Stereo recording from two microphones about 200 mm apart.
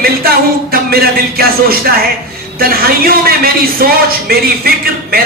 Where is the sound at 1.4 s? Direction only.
50° right (ahead or behind).